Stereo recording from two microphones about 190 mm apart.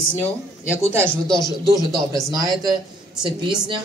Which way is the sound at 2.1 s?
20° right (ahead or behind).